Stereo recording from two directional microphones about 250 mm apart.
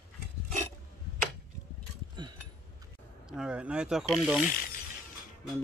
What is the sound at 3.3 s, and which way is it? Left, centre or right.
Speech, centre.